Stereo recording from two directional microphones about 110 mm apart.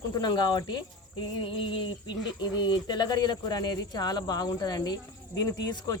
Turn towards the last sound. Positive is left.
turn(degrees=35)  # may be behind; listen again after turning